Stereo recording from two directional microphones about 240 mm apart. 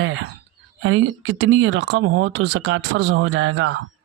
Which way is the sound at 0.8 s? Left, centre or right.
Right.